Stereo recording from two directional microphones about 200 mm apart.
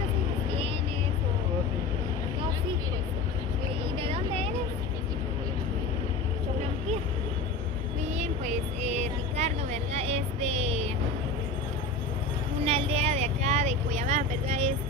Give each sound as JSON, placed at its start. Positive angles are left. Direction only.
{"t": 3.9, "sound": "a sound", "side_deg": -25}
{"t": 8.2, "sound": "vehicle", "side_deg": -35}
{"t": 12.6, "sound": "vehicle", "side_deg": -30}